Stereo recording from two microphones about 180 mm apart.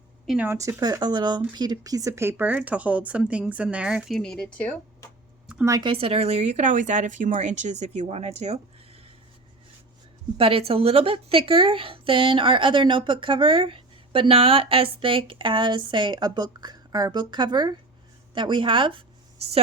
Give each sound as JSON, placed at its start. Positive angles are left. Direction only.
{"t": 0.3, "sound": "a woman's voice", "side_deg": -10}
{"t": 5.5, "sound": "a sound", "side_deg": -5}
{"t": 5.7, "sound": "speech", "side_deg": -30}
{"t": 10.3, "sound": "a woman's voice", "side_deg": -30}